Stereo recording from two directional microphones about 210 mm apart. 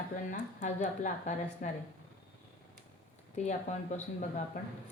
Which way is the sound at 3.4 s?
35° left (ahead or behind).